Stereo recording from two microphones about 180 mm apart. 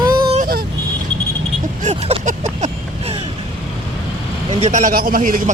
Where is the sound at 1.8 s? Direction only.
40° right (ahead or behind).